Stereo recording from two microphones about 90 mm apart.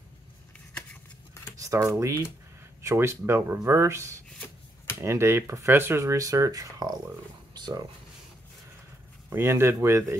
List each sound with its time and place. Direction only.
1.6 s speech: 40° right (ahead or behind)
7.5 s a sound: 55° right (ahead or behind)
9.3 s speech: 30° right (ahead or behind)